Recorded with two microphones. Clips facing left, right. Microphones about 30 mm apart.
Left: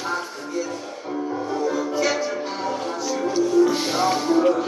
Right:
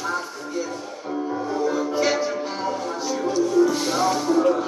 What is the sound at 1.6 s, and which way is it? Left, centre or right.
Music, centre.